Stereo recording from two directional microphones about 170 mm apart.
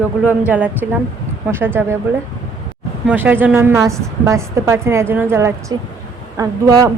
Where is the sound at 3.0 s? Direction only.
10° right (ahead or behind).